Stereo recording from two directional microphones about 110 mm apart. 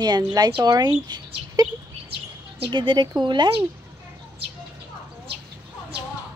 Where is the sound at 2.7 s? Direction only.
45° right (ahead or behind).